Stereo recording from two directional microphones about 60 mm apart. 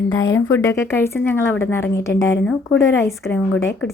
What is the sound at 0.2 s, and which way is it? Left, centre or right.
Speech, left.